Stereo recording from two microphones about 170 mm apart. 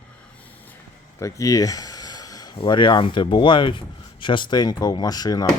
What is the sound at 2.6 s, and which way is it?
Speech, 30° left (ahead or behind).